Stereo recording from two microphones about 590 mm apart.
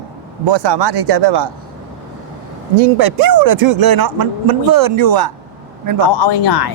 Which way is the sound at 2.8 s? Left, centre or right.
Right.